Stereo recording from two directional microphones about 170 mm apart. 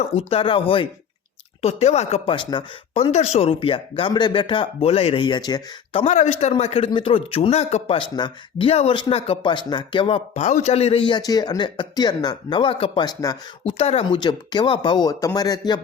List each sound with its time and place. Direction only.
0.2 s speech: 35° left (ahead or behind)
6.0 s speech: 40° left (ahead or behind); by 13.7 s 25° left (ahead or behind)
13.7 s speech: 35° left (ahead or behind)